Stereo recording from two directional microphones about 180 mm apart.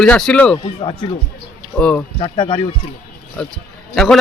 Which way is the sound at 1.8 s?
5° left (ahead or behind).